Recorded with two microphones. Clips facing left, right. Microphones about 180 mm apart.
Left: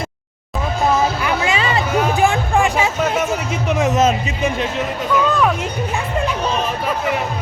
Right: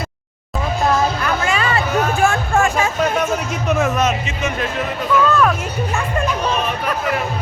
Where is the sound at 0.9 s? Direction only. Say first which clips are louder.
Left 1 dB; 10° left (ahead or behind).